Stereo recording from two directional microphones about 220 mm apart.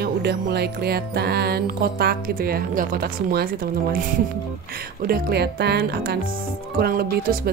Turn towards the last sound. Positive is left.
turn(degrees=-40)  # may be behind; listen again after turning